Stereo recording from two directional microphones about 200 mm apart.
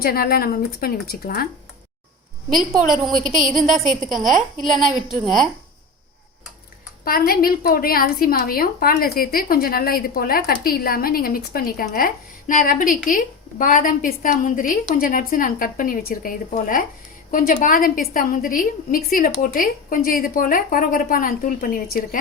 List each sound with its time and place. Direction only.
0.0 s a woman's voice: 50° left (ahead or behind)
2.6 s a woman's voice: centre (ahead or behind)
7.0 s a woman's voice: 50° left (ahead or behind)